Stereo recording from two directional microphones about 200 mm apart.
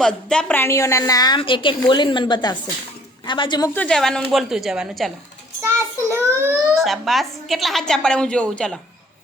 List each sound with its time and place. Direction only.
0.0 s a woman's voice: 5° left (ahead or behind); by 3.7 s 25° left (ahead or behind)
3.8 s a woman's voice: 5° left (ahead or behind)
5.6 s child singing: 10° right (ahead or behind)
6.7 s a woman's voice: centre (ahead or behind)